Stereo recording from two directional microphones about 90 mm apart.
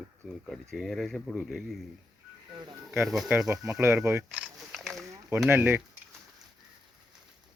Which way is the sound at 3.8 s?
30° right (ahead or behind).